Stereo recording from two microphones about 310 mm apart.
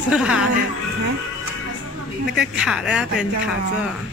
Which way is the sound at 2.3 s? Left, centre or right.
Centre.